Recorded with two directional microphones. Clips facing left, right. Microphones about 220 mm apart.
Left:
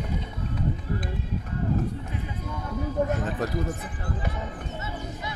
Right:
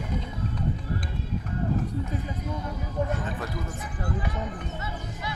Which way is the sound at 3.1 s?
40° left (ahead or behind).